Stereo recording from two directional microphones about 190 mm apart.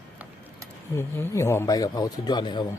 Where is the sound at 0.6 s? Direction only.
10° left (ahead or behind).